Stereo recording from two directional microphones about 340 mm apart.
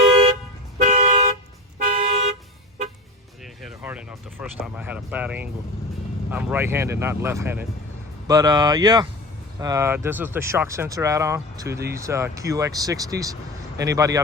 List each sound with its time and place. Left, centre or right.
0.8 s toot: right
3.4 s speech: centre